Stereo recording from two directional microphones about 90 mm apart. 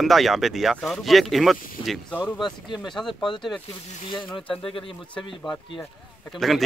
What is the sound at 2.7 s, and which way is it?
Speech, centre (ahead or behind).